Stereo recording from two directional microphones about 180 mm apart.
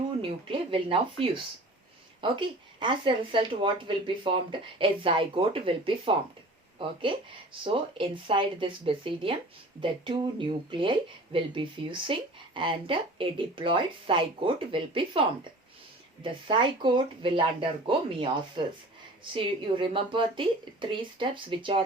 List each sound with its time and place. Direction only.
0.2 s speech: 30° right (ahead or behind)
7.6 s speech: 30° right (ahead or behind)